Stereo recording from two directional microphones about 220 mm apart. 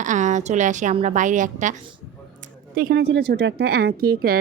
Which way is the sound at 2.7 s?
45° right (ahead or behind).